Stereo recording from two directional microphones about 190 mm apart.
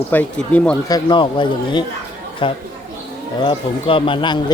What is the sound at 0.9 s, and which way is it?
Speech, 20° left (ahead or behind).